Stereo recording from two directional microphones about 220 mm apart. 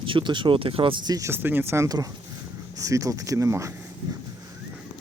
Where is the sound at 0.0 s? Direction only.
20° right (ahead or behind).